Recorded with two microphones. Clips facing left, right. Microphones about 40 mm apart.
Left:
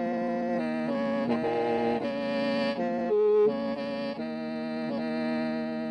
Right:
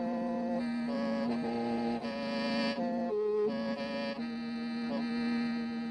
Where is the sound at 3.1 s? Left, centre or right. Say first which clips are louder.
Left 10 dB; left.